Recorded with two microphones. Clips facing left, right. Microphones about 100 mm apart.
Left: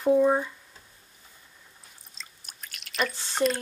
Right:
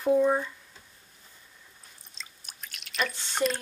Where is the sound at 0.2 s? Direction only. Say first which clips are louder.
Left 2 dB; 15° left (ahead or behind).